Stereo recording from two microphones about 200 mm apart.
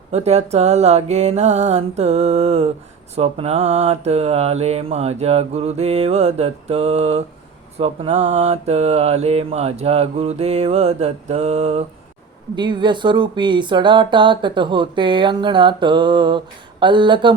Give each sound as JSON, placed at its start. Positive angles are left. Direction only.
{"t": 0.1, "sound": "mantra", "side_deg": -30}
{"t": 12.5, "sound": "speech", "side_deg": -25}